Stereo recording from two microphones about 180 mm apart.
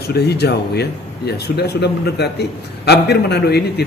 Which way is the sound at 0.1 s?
65° left (ahead or behind).